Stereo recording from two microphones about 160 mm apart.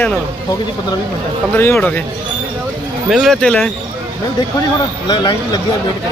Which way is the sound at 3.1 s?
Centre (ahead or behind).